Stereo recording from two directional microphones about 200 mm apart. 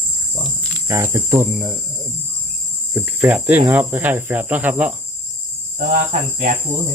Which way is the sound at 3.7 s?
10° right (ahead or behind).